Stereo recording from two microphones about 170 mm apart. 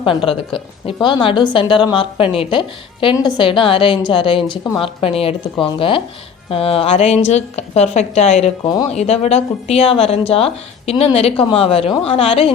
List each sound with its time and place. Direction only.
0.0 s a woman's voice: 30° left (ahead or behind)